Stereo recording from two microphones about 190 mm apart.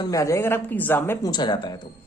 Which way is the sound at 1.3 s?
25° left (ahead or behind).